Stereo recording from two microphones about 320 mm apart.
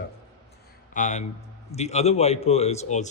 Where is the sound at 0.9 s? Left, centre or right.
Left.